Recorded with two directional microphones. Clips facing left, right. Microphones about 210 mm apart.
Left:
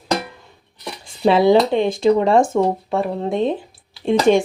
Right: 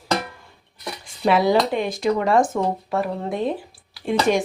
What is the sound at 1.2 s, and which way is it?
Speech, 25° left (ahead or behind).